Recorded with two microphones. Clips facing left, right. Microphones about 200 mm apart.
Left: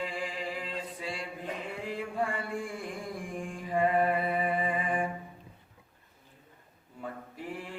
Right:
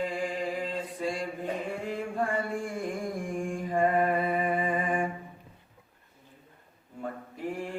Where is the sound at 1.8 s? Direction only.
45° right (ahead or behind).